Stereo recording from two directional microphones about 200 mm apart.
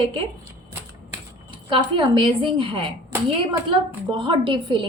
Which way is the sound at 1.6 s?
25° right (ahead or behind).